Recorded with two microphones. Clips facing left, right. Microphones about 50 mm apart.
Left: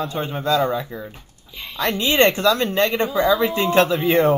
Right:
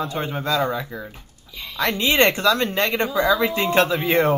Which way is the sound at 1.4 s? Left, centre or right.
Left.